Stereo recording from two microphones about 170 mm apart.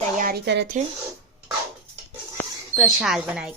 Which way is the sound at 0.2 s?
65° right (ahead or behind).